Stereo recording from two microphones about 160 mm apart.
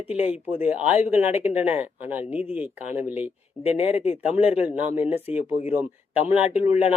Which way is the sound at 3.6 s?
40° left (ahead or behind).